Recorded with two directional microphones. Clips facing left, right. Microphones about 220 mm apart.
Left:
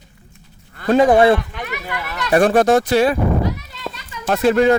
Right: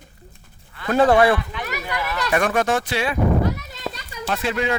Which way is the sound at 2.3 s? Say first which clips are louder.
Left 8 dB; 35° left (ahead or behind).